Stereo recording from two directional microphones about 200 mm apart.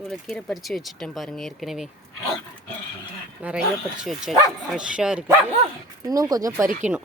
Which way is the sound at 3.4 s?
5° right (ahead or behind).